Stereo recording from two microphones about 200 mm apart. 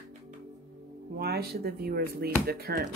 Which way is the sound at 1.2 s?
50° right (ahead or behind).